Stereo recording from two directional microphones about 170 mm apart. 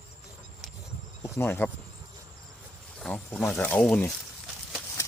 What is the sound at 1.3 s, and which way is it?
Speech, 10° left (ahead or behind).